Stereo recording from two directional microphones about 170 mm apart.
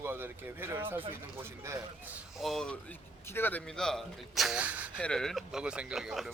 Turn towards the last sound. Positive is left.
turn(degrees=0)  # may be behind; listen again after turning